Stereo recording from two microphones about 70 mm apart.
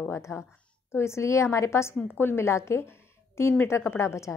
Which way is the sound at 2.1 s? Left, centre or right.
Left.